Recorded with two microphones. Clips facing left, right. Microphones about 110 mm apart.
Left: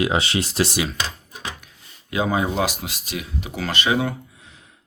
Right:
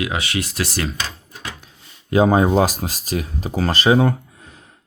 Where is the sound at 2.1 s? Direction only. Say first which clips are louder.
Right 7 dB; 40° right (ahead or behind).